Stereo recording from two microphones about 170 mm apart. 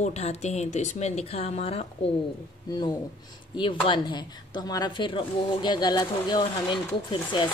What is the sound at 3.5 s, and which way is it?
Speech, 30° left (ahead or behind).